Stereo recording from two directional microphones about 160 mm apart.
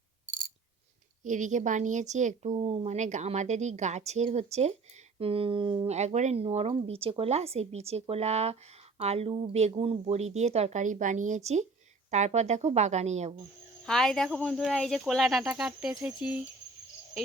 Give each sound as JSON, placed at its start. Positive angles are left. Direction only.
{"t": 1.2, "sound": "speech", "side_deg": -50}
{"t": 13.8, "sound": "speech", "side_deg": 5}